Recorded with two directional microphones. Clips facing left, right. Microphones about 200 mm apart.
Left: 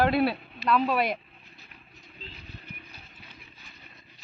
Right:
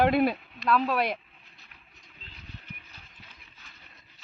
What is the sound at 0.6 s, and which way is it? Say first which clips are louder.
Speech: left 1 dB; centre (ahead or behind).